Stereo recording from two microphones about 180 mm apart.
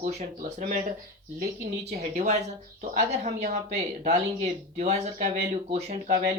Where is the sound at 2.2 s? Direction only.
35° right (ahead or behind).